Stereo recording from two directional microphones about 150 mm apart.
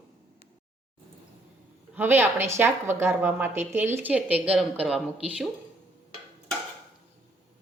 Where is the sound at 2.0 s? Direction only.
15° right (ahead or behind).